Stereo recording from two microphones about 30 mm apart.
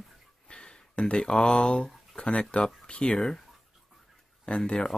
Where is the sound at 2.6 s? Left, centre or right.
Left.